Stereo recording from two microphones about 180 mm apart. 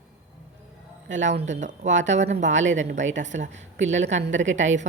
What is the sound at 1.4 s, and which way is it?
Speech, 40° right (ahead or behind).